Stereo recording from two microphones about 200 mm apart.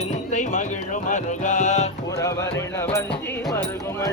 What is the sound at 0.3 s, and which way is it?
Music, 40° left (ahead or behind).